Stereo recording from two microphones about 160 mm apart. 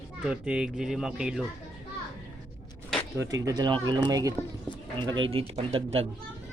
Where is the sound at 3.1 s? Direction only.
20° right (ahead or behind); by 6.0 s 35° right (ahead or behind).